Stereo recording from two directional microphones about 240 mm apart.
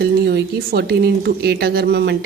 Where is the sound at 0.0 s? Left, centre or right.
Right.